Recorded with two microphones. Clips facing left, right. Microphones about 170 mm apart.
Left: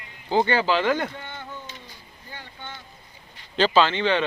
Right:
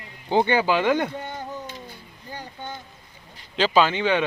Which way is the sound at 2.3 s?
40° right (ahead or behind).